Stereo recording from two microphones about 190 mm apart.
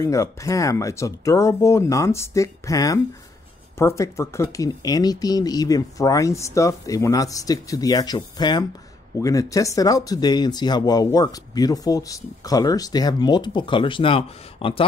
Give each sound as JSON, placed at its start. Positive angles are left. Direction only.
{"t": 0.0, "sound": "speech", "side_deg": 15}